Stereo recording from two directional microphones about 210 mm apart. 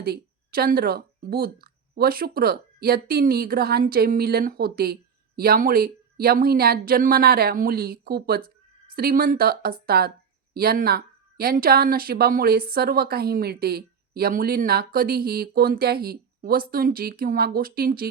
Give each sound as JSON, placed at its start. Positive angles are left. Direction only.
{"t": 0.0, "sound": "speech", "side_deg": -45}